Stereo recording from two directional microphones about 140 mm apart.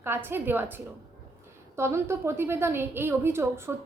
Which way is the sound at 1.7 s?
20° right (ahead or behind).